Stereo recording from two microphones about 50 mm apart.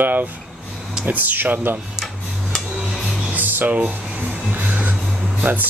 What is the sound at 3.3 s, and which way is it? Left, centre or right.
Music, right.